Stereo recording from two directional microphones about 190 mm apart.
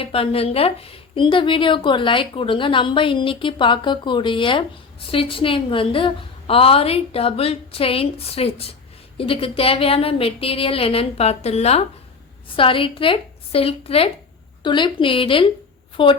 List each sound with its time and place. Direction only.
0.0 s a woman's voice: 30° left (ahead or behind)